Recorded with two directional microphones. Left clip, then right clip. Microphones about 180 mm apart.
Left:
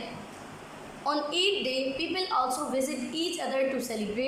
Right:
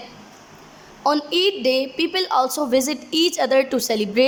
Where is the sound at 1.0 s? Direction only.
35° right (ahead or behind).